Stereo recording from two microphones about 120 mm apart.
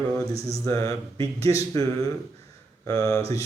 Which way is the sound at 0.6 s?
30° left (ahead or behind).